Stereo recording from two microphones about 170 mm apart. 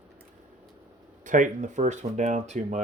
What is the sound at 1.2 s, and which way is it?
Speech, 50° right (ahead or behind).